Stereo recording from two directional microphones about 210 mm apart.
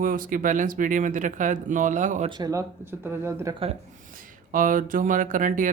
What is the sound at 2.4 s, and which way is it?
Speech, 15° right (ahead or behind).